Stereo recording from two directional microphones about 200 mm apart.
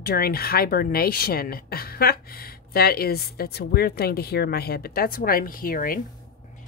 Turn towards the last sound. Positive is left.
turn(degrees=45)  # may be behind; listen again after turning